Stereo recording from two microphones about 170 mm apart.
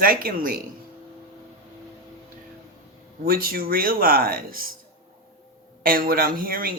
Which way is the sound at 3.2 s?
60° right (ahead or behind).